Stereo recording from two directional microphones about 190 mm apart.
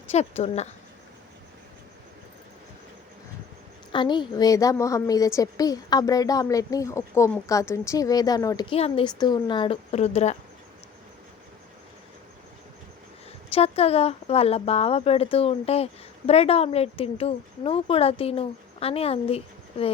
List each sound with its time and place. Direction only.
0.1 s speech: 35° left (ahead or behind)
3.9 s a woman's voice: 25° left (ahead or behind)
13.5 s speech: 30° left (ahead or behind)